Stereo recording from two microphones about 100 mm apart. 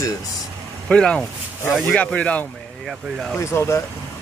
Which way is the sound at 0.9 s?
10° left (ahead or behind).